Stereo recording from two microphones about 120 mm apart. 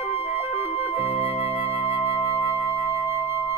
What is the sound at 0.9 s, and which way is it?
Music, 50° left (ahead or behind).